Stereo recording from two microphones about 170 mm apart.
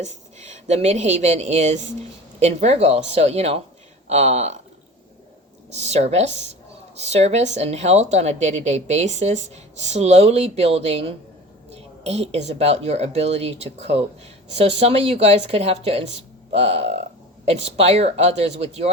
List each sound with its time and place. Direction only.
0.0 s a woman's voice: 40° right (ahead or behind)
5.7 s a woman's voice: 40° right (ahead or behind)